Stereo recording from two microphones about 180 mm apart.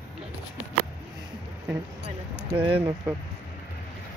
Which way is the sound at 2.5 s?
30° right (ahead or behind).